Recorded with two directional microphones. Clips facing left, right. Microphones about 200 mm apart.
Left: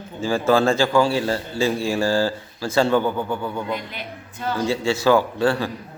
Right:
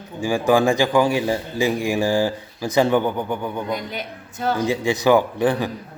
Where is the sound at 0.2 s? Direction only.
15° right (ahead or behind).